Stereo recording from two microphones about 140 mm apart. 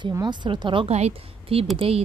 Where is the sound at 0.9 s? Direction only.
45° right (ahead or behind).